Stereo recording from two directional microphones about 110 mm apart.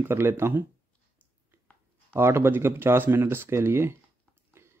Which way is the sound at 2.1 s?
20° right (ahead or behind).